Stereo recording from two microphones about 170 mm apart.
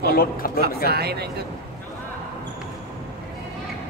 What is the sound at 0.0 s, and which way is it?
Speech, 60° left (ahead or behind).